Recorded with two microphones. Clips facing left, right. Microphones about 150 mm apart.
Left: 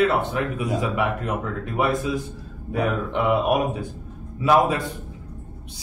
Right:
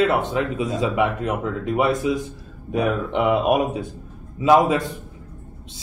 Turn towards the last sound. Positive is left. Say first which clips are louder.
# right 3 dB
turn(degrees=-20)  # may be behind; listen again after turning